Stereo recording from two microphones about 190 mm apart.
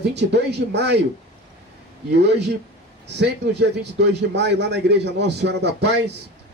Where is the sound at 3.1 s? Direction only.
65° right (ahead or behind).